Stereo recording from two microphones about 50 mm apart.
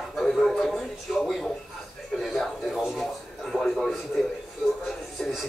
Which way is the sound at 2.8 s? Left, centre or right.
Centre.